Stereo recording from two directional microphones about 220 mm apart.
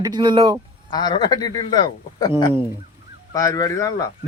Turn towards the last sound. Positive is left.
turn(degrees=15)  # may be behind; listen again after turning